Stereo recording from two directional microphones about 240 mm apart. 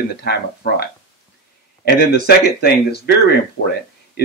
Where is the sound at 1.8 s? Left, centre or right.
Left.